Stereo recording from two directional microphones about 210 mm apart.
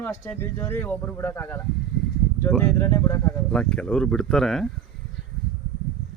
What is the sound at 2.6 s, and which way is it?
Speech, 15° left (ahead or behind).